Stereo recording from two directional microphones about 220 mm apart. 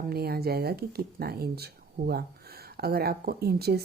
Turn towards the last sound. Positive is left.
turn(degrees=-45)  # may be behind; listen again after turning